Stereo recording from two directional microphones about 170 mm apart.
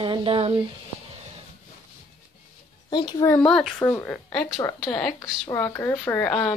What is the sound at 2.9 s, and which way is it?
Speech, 25° left (ahead or behind).